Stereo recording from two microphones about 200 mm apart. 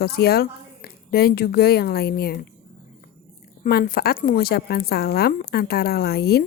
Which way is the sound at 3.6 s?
45° left (ahead or behind).